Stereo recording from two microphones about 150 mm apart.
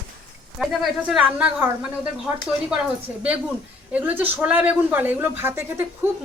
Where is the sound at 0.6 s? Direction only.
5° right (ahead or behind).